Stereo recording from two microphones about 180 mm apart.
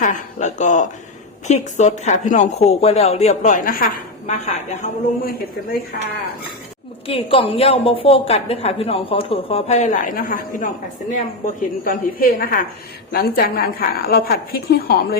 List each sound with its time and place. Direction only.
0.0 s a woman's voice: 40° left (ahead or behind)
7.1 s a woman's voice: 30° left (ahead or behind); by 14.9 s 60° left (ahead or behind)